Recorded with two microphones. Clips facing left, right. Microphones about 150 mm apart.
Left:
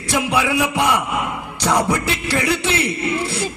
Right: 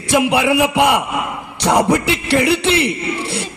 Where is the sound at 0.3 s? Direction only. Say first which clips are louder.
Right 4 dB; 65° right (ahead or behind).